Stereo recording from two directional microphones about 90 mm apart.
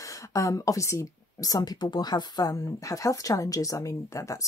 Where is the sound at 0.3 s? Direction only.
35° left (ahead or behind).